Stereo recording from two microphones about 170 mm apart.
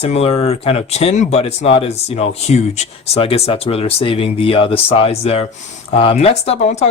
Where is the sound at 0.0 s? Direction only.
35° left (ahead or behind).